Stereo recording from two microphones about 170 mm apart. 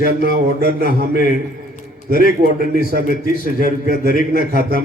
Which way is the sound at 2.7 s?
60° right (ahead or behind).